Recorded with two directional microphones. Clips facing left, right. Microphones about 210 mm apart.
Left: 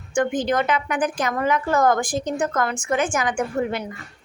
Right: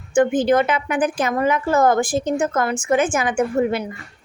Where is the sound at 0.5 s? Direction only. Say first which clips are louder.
Right 4 dB; 25° right (ahead or behind).